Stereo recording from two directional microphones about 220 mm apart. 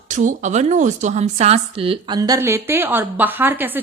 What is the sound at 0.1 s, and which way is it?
A woman's voice, 35° right (ahead or behind).